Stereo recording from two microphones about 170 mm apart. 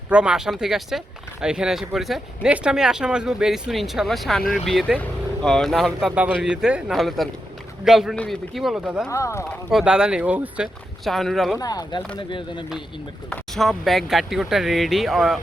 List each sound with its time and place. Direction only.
0.1 s speech: 5° right (ahead or behind)
9.0 s speech: 15° left (ahead or behind)
9.6 s speech: 5° right (ahead or behind)
11.0 s speech: centre (ahead or behind)
11.6 s speech: 20° left (ahead or behind)
13.3 s speech: centre (ahead or behind)